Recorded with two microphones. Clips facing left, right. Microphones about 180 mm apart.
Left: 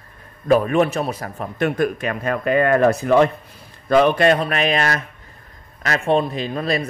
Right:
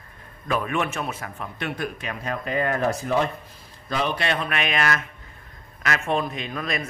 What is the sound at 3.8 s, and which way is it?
Speech, 55° left (ahead or behind).